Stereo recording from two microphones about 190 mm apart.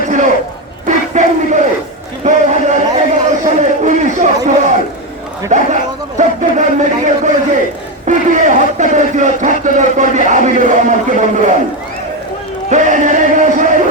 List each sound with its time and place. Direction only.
0.9 s battle cry: 40° right (ahead or behind)
2.2 s a sound: 40° right (ahead or behind)
12.7 s music: 40° right (ahead or behind)